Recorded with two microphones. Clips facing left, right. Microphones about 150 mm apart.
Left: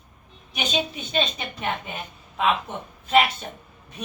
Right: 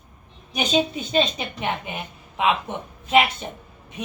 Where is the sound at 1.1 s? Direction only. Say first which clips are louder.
Right 4 dB; 20° right (ahead or behind).